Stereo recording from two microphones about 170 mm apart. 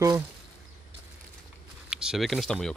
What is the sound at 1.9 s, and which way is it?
Speech, 5° right (ahead or behind).